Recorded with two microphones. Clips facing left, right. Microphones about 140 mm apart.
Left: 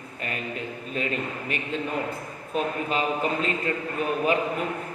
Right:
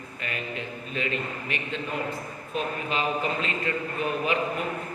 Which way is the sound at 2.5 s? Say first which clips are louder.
Left 3 dB; 40° left (ahead or behind).